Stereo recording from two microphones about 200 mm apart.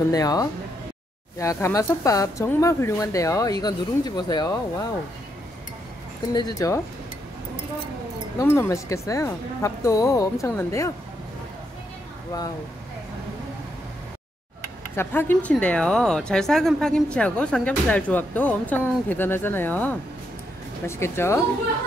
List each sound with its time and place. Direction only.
0.1 s speech: 20° left (ahead or behind)
6.3 s speech: 15° left (ahead or behind)
8.4 s speech: 15° left (ahead or behind)
15.0 s speech: 10° left (ahead or behind)